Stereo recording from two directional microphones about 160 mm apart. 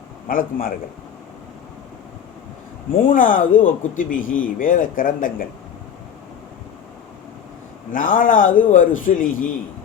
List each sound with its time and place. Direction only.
0.3 s speech: 60° left (ahead or behind)
3.1 s speech: 60° left (ahead or behind)
7.9 s speech: 55° left (ahead or behind)